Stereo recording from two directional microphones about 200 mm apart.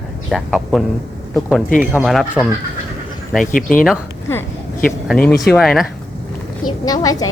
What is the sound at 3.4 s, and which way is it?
Speech, 45° left (ahead or behind).